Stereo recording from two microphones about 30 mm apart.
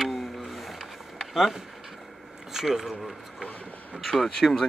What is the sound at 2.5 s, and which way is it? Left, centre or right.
Speech, centre.